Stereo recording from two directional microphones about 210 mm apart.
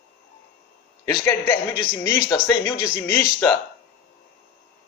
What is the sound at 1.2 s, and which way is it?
Speech, 10° left (ahead or behind).